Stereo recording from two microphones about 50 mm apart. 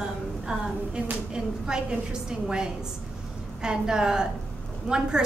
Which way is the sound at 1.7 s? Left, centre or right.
Centre.